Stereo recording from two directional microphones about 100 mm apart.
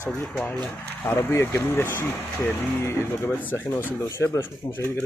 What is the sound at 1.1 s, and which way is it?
Speech, 25° left (ahead or behind).